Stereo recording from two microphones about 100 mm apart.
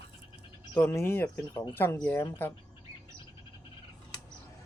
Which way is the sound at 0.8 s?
25° left (ahead or behind).